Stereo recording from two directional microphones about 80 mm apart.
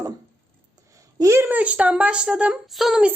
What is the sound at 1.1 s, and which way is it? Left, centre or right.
Speech, right.